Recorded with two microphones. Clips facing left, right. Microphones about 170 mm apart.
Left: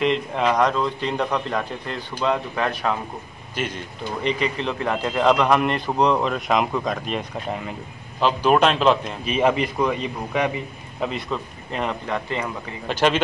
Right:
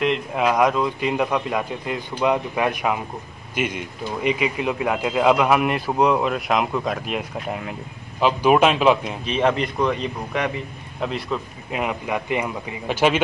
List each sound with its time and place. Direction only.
0.0 s speech: 5° right (ahead or behind)
9.2 s speech: 5° left (ahead or behind)